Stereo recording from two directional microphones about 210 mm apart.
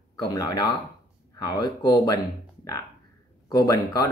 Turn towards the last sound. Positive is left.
turn(degrees=15)  # may be behind; listen again after turning